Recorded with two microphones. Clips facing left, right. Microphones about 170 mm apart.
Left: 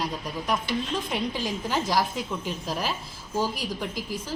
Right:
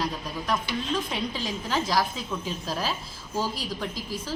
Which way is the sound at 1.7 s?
15° left (ahead or behind).